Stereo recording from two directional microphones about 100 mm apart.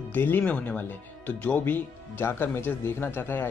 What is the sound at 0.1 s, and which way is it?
Speech, 20° left (ahead or behind).